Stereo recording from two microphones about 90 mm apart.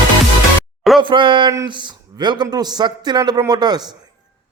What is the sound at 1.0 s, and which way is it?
A man's voice, 65° right (ahead or behind).